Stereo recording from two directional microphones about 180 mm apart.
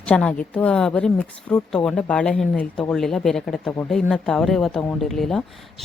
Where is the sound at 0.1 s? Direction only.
5° left (ahead or behind).